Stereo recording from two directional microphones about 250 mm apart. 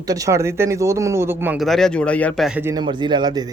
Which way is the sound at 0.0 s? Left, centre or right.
Centre.